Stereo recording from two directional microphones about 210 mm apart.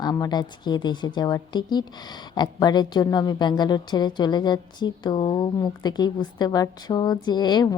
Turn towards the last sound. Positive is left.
turn(degrees=20)  # may be behind; listen again after turning